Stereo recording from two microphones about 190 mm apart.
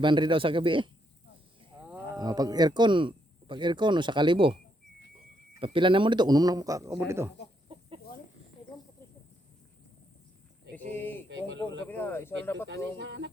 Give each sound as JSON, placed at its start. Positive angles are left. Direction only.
{"t": 0.0, "sound": "speech", "side_deg": -25}
{"t": 1.7, "sound": "wild animals", "side_deg": -20}
{"t": 2.1, "sound": "speech", "side_deg": -20}
{"t": 5.5, "sound": "speech", "side_deg": -25}
{"t": 10.9, "sound": "speech", "side_deg": 10}
{"t": 11.3, "sound": "speech", "side_deg": -70}
{"t": 11.9, "sound": "speech", "side_deg": 10}
{"t": 12.6, "sound": "speech", "side_deg": -80}